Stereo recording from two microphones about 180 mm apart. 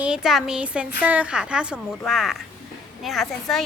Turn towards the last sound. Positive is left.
turn(degrees=0)  # may be behind; listen again after turning